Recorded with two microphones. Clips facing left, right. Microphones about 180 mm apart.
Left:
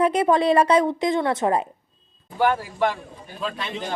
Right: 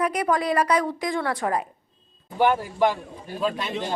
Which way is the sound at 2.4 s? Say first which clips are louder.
Right 1 dB; 10° right (ahead or behind).